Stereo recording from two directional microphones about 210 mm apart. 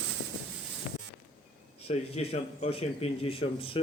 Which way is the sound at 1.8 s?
30° left (ahead or behind).